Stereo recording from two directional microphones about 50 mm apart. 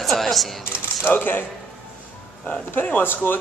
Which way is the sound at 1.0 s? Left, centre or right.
Left.